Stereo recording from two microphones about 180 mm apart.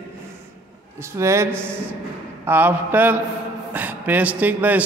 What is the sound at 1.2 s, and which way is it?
A man's voice, 15° right (ahead or behind).